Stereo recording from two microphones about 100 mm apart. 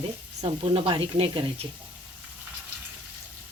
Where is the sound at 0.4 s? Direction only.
70° right (ahead or behind).